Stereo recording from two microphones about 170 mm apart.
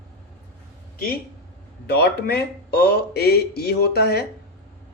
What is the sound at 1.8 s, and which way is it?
Speech, 70° left (ahead or behind).